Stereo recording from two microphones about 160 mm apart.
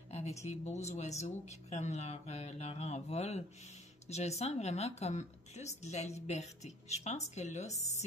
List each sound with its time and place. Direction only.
0.1 s a woman's voice: 40° left (ahead or behind)